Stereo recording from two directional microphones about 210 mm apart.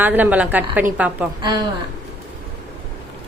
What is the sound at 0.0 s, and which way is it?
A woman's voice, 10° right (ahead or behind).